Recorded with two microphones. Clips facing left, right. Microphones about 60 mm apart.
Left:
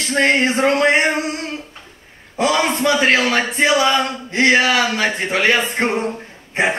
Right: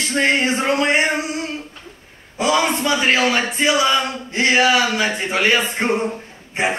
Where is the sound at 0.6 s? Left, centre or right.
Left.